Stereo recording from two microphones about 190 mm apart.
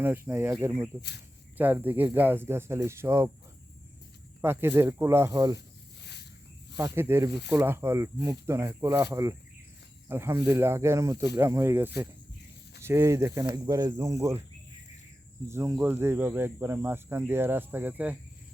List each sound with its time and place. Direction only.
0.0 s speech: 10° right (ahead or behind)
4.4 s speech: 10° right (ahead or behind)
6.0 s a sound: 60° left (ahead or behind)
6.7 s speech: 15° right (ahead or behind)
15.4 s speech: 15° right (ahead or behind)